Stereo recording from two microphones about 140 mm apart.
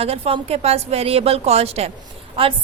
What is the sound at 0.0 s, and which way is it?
A woman's voice, 45° right (ahead or behind).